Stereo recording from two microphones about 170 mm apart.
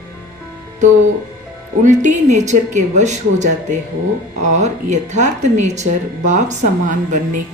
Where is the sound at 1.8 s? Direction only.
45° right (ahead or behind).